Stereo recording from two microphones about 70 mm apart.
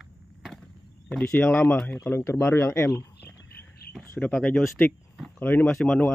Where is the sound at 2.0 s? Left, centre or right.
Left.